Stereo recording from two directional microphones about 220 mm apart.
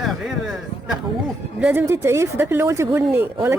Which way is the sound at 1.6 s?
10° right (ahead or behind).